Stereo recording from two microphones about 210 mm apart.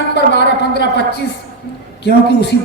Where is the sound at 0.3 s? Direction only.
55° left (ahead or behind).